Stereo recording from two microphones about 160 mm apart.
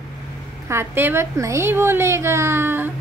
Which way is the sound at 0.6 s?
15° right (ahead or behind).